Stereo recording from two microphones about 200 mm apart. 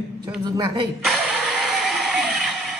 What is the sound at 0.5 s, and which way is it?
Speech, 20° right (ahead or behind).